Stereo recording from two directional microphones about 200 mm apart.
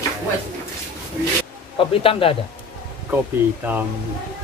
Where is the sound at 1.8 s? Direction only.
25° left (ahead or behind).